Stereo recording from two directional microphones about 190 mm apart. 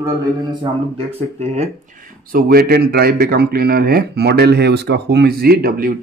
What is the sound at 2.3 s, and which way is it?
Speech, 50° right (ahead or behind).